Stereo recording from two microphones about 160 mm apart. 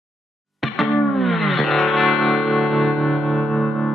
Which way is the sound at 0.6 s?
Centre (ahead or behind).